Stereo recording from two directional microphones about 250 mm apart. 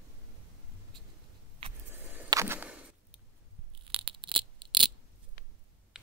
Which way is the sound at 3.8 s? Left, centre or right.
Right.